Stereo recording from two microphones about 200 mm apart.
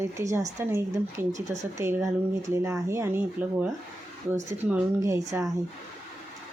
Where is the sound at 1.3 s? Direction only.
35° right (ahead or behind).